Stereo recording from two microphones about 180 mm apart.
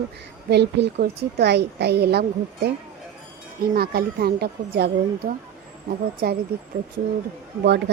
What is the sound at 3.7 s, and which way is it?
A woman's voice, 60° right (ahead or behind).